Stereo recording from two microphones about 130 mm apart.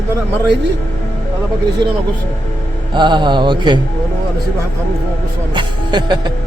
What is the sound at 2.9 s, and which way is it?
Speech, 35° right (ahead or behind).